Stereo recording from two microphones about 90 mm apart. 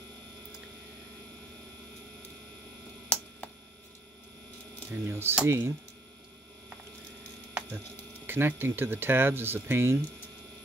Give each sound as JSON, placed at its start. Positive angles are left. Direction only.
{"t": 4.9, "sound": "speech", "side_deg": -25}
{"t": 8.3, "sound": "speech", "side_deg": -25}